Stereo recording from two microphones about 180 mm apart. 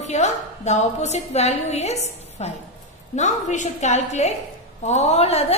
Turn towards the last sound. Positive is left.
turn(degrees=35)  # may be behind; listen again after turning